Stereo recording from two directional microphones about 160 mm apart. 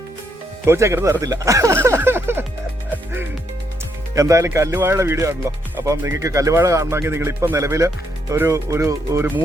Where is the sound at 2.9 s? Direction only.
15° right (ahead or behind).